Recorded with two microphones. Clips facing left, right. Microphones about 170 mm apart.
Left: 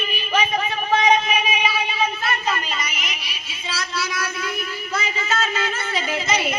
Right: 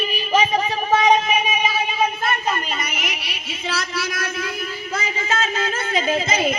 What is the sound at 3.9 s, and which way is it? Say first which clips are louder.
Child singing: right 1 dB; 50° right (ahead or behind).